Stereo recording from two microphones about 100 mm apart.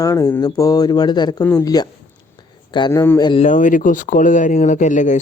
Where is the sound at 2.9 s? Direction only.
30° left (ahead or behind).